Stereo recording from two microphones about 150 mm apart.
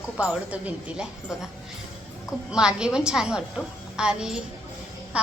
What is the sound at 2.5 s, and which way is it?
A woman's voice, 5° right (ahead or behind).